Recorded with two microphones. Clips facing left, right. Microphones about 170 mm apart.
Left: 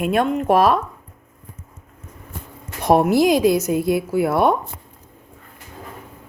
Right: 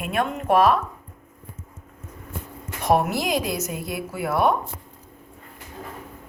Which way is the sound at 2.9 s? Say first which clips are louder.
Left 7 dB; 35° left (ahead or behind).